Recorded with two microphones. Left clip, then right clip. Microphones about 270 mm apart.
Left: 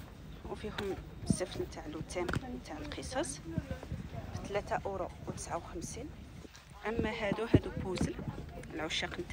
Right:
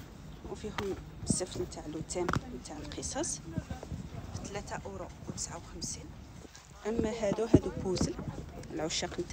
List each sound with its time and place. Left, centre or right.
0.5 s speech: centre
6.8 s speech: centre